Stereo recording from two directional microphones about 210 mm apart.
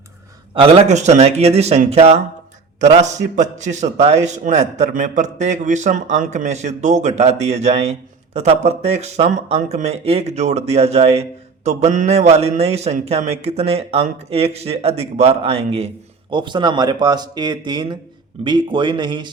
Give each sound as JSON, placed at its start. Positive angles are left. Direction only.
{"t": 0.5, "sound": "a man's voice", "side_deg": -25}